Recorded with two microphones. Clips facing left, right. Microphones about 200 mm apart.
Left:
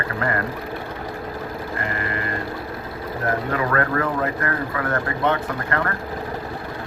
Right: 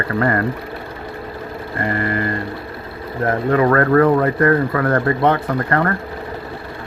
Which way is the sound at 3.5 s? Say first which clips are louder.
Right 11 dB; 40° right (ahead or behind).